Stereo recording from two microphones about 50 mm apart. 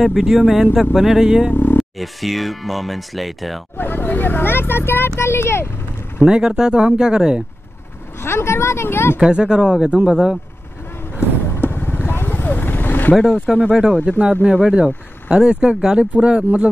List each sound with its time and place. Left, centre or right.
0.0 s speech: centre
1.5 s vehicle: left
1.8 s speech: centre
3.7 s speech: left
6.2 s speech: centre
8.2 s speech: left
9.2 s speech: centre
11.5 s vehicle: left
13.1 s speech: centre
14.2 s speech: right
14.5 s speech: centre